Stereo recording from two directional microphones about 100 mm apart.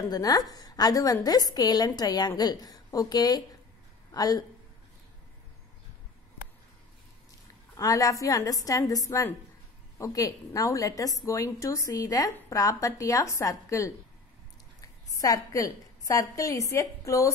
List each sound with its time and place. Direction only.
0.1 s a woman's voice: 40° left (ahead or behind)
7.7 s a woman's voice: 35° left (ahead or behind)